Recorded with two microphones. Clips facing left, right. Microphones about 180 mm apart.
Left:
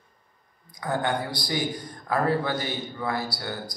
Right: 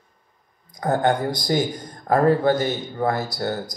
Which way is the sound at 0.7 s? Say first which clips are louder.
Right 7 dB; 45° right (ahead or behind).